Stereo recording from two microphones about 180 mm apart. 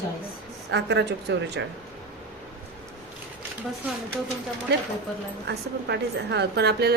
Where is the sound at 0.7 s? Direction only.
70° right (ahead or behind).